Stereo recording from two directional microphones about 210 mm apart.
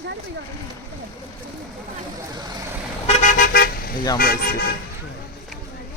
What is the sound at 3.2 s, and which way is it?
Car, 40° left (ahead or behind).